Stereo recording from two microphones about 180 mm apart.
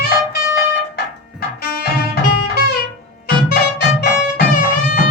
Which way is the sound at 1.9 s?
60° left (ahead or behind).